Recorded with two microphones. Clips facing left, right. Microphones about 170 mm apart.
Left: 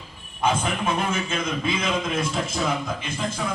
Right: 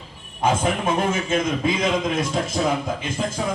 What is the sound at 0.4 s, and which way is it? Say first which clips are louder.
A man's voice: right 3 dB; 40° right (ahead or behind).